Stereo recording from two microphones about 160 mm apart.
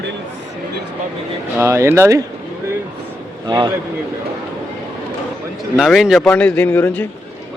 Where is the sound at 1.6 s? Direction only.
15° right (ahead or behind).